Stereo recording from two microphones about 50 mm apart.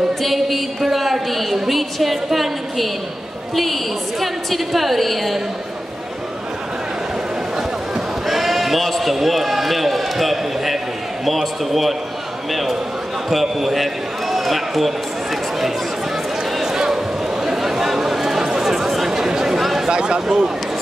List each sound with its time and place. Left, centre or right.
0.2 s a woman's voice: centre
8.3 s a woman's voice: centre
13.3 s a woman's voice: centre
16.5 s a sound: centre
17.5 s chatter: centre
19.9 s speech: centre